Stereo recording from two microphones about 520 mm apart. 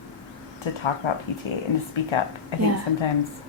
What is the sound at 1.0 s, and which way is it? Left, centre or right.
A woman's voice, left.